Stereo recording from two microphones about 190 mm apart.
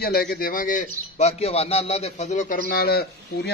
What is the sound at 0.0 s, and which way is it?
A man's voice, 55° left (ahead or behind).